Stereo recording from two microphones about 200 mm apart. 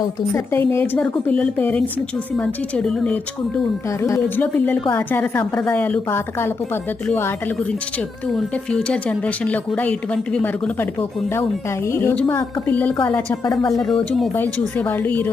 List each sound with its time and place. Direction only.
0.7 s a woman's voice: 10° left (ahead or behind)
11.9 s speech: 10° left (ahead or behind)
13.4 s speech: 20° left (ahead or behind)
13.9 s a woman's voice: 5° left (ahead or behind)